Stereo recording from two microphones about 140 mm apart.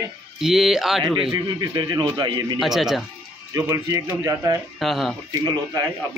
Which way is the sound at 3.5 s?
25° right (ahead or behind).